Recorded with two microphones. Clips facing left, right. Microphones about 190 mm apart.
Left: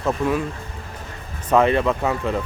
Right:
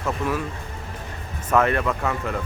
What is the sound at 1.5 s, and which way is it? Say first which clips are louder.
Speech: left 4 dB; 20° left (ahead or behind).